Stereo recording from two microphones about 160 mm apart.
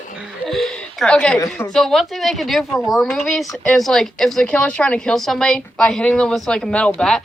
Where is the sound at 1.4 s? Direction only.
20° left (ahead or behind).